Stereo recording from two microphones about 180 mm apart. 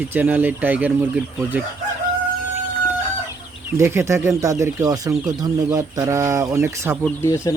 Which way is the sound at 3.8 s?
15° right (ahead or behind).